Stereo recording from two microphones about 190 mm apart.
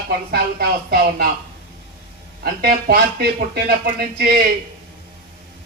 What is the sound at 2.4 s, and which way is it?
Speech, 50° right (ahead or behind).